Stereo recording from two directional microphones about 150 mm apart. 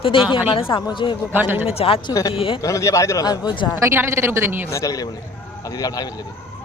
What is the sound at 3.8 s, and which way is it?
Speech, 15° right (ahead or behind).